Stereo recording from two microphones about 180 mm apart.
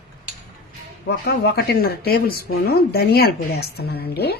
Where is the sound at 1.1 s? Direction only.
65° left (ahead or behind).